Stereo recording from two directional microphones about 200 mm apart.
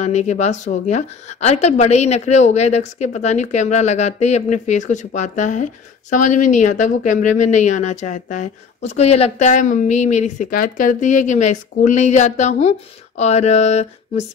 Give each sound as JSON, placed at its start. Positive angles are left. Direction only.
{"t": 0.0, "sound": "a woman's voice", "side_deg": 35}